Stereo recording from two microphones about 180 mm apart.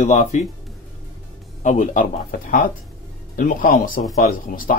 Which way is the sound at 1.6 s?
40° left (ahead or behind).